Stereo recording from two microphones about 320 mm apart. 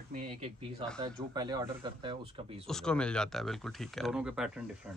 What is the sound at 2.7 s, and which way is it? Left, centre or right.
Speech, centre.